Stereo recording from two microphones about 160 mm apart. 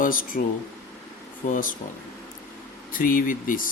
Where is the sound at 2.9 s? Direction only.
60° left (ahead or behind).